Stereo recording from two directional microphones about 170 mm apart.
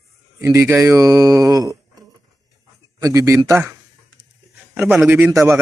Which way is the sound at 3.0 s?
20° right (ahead or behind).